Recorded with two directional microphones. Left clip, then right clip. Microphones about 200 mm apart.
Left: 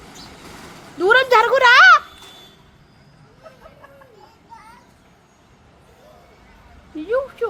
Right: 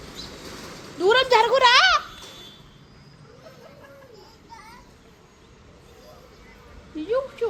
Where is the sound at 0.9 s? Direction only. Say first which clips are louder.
Left 4 dB; 45° left (ahead or behind).